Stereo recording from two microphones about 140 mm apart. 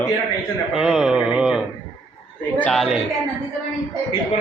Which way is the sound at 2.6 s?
Centre (ahead or behind).